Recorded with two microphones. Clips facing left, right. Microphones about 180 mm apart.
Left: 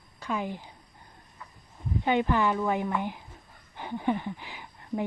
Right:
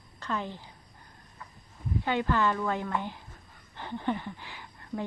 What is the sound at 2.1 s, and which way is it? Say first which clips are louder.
Speech: left 3 dB; 15° left (ahead or behind).